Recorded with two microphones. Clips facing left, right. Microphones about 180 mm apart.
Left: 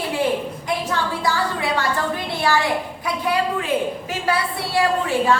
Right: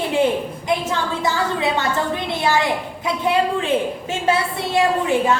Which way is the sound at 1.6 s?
20° right (ahead or behind).